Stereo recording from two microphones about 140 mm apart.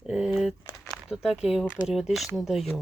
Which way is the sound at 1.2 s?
5° right (ahead or behind).